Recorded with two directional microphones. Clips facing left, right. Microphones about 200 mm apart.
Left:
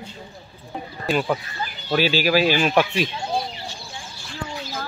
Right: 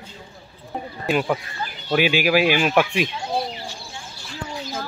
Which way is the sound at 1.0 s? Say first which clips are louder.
Right 1 dB; 10° right (ahead or behind).